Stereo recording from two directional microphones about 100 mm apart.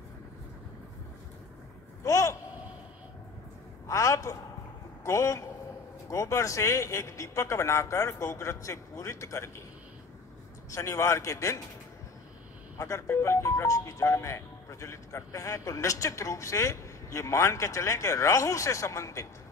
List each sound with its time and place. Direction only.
2.0 s a sound: 30° left (ahead or behind)
3.8 s a man's voice: 30° left (ahead or behind)
10.7 s speech: 30° left (ahead or behind)
12.7 s speech: 30° left (ahead or behind)